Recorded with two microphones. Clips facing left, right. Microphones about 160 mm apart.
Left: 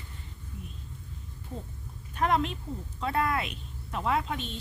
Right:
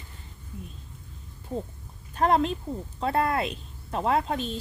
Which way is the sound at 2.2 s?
35° right (ahead or behind).